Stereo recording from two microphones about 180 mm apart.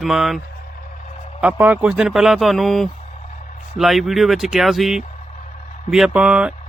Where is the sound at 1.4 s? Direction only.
10° right (ahead or behind).